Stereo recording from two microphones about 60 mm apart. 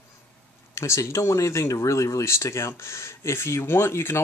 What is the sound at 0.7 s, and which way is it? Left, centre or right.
Speech, left.